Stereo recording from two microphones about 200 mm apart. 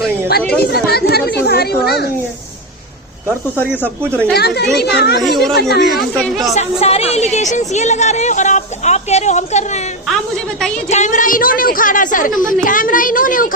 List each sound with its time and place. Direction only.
0.3 s a woman's voice: 50° left (ahead or behind)
4.4 s a woman's voice: 55° left (ahead or behind)
5.2 s speech: centre (ahead or behind)
5.5 s speech: 55° left (ahead or behind)
6.5 s a woman's voice: 35° left (ahead or behind)
10.8 s a woman's voice: 35° left (ahead or behind)